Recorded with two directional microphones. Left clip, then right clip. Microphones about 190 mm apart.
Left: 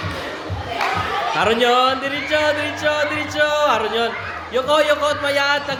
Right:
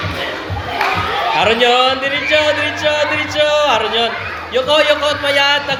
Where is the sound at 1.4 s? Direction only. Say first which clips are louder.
Right 4 dB; 30° left (ahead or behind).